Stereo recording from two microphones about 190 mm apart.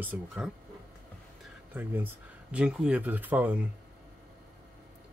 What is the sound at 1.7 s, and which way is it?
Speech, 10° right (ahead or behind).